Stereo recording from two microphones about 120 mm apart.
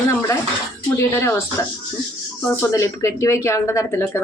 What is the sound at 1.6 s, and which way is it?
Speech, 25° left (ahead or behind).